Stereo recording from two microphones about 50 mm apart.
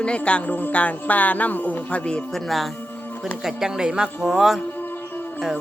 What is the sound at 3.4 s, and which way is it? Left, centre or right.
Music, centre.